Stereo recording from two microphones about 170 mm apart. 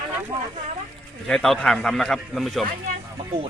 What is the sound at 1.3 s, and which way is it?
Speech, 5° left (ahead or behind).